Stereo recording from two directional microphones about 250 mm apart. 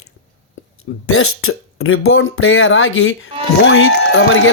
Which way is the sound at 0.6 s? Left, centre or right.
Left.